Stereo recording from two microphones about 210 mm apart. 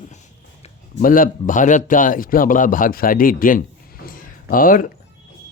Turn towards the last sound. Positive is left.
turn(degrees=40)  # may be behind; listen again after turning